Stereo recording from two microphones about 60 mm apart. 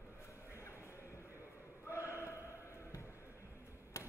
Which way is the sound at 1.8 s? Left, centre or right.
Left.